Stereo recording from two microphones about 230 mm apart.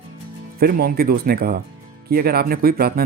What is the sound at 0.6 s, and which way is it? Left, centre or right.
Speech, right.